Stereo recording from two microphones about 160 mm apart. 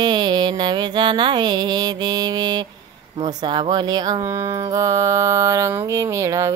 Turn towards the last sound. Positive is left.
turn(degrees=-20)  # may be behind; listen again after turning